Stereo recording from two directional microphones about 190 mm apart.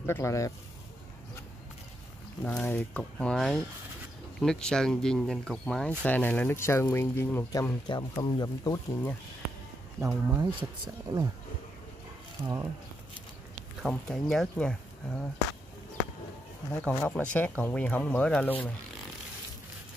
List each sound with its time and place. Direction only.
0.0 s speech: 15° left (ahead or behind)
2.4 s speech: 10° left (ahead or behind)
9.9 s speech: 15° right (ahead or behind)
10.4 s speech: 25° right (ahead or behind)
12.4 s speech: 20° right (ahead or behind)
13.8 s speech: centre (ahead or behind)
16.7 s speech: 10° left (ahead or behind)